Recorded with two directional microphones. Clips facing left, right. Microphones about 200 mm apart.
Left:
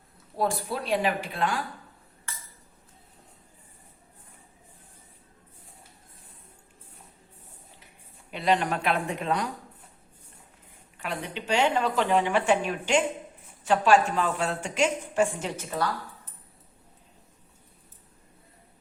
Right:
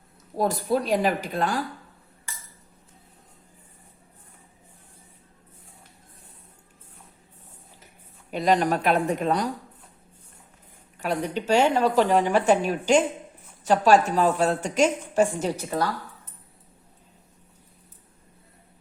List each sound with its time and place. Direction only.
0.3 s a woman's voice: 40° right (ahead or behind)
8.3 s a woman's voice: 40° right (ahead or behind)
10.9 s a woman's voice: 40° right (ahead or behind)